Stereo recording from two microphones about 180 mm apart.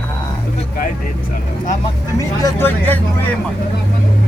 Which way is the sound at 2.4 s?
10° left (ahead or behind).